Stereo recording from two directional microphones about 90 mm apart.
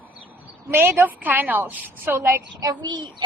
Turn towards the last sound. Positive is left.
turn(degrees=-60)  # may be behind; listen again after turning